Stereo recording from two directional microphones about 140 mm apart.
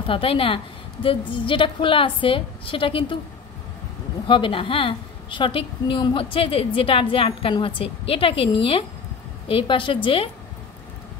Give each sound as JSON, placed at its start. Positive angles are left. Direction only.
{"t": 0.0, "sound": "a woman's voice", "side_deg": 40}
{"t": 4.3, "sound": "a woman's voice", "side_deg": 40}